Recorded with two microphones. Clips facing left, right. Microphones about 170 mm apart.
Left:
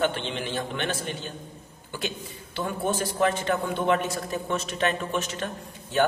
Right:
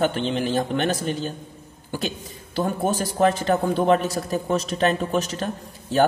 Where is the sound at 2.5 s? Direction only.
40° right (ahead or behind).